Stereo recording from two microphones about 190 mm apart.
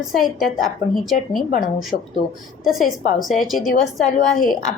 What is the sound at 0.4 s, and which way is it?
Speech, 45° left (ahead or behind).